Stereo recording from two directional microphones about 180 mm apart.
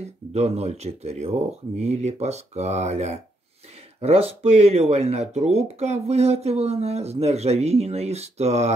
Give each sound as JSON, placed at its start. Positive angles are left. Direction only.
{"t": 0.0, "sound": "speech", "side_deg": -35}